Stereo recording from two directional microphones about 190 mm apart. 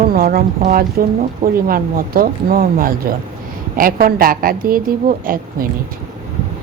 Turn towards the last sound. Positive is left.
turn(degrees=-50)  # may be behind; listen again after turning